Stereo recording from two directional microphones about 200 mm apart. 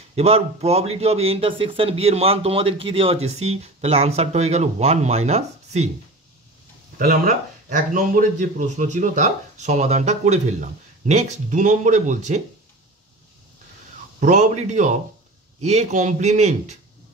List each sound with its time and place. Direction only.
0.1 s speech: 30° right (ahead or behind)
7.0 s speech: 45° right (ahead or behind)
14.2 s speech: 40° right (ahead or behind)